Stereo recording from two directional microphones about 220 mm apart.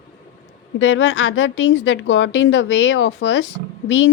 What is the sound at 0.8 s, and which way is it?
A woman's voice, 55° left (ahead or behind).